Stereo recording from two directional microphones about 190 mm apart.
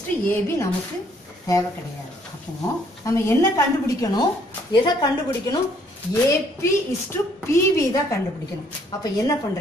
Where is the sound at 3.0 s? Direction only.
15° left (ahead or behind).